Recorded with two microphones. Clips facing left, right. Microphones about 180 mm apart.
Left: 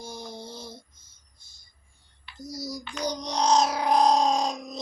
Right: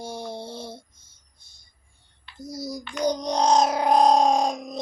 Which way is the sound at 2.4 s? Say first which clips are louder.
Right 3 dB; 55° right (ahead or behind).